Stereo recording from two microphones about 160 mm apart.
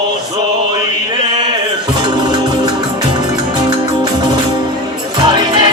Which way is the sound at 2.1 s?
30° right (ahead or behind).